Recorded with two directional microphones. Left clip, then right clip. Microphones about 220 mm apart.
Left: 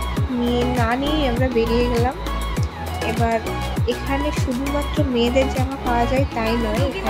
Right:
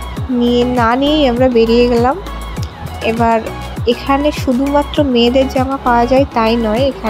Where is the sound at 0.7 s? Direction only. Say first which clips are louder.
Right 9 dB; 30° right (ahead or behind).